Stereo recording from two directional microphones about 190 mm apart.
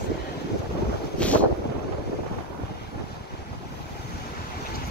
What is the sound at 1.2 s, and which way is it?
Boat, 5° left (ahead or behind).